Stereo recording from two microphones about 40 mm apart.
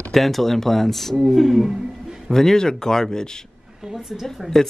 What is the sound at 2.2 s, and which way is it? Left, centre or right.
Speech, centre.